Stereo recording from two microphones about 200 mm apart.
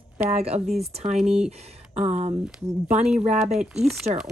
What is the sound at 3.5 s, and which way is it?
Speech, centre (ahead or behind).